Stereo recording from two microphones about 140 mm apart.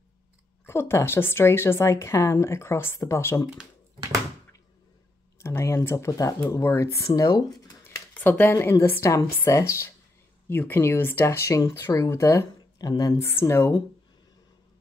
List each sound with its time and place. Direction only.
0.7 s a woman's voice: 20° left (ahead or behind)
5.4 s speech: 20° left (ahead or behind)
8.1 s speech: 15° left (ahead or behind)